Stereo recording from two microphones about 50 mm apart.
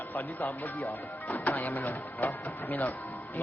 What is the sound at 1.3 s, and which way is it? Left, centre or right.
A man's voice, left.